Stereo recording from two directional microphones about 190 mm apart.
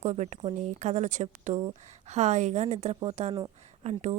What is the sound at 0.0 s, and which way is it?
Speech, 35° right (ahead or behind).